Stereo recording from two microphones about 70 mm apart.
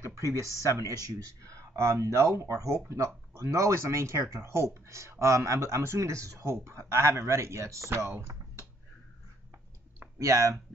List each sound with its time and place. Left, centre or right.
0.0 s speech: right
10.1 s speech: right